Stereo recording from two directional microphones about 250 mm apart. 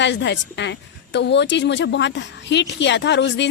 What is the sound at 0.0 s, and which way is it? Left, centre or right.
A woman's voice, left.